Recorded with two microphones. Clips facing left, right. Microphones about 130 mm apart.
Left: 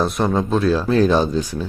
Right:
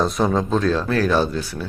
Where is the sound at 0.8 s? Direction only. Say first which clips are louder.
Left 3 dB; 20° left (ahead or behind).